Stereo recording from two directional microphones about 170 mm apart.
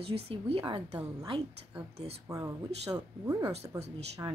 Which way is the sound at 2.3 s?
20° right (ahead or behind).